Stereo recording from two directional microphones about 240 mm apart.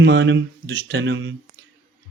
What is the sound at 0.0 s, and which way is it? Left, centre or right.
A man's voice, right.